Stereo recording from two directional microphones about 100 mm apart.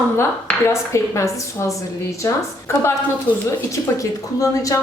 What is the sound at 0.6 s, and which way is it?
A woman's voice, 30° left (ahead or behind).